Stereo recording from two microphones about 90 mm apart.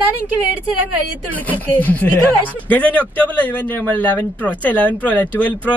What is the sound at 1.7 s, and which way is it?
A man's voice, 20° left (ahead or behind).